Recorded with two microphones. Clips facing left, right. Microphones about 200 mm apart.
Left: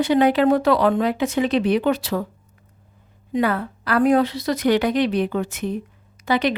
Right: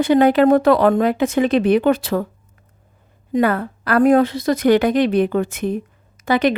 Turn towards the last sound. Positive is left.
turn(degrees=-50)  # may be behind; listen again after turning